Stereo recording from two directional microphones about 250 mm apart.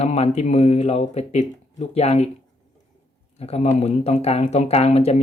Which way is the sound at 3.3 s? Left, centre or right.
Left.